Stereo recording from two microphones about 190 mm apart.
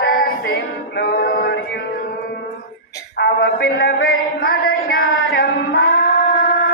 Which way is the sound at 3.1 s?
65° left (ahead or behind).